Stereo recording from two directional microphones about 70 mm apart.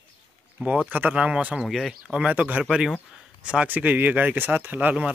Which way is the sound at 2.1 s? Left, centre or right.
Centre.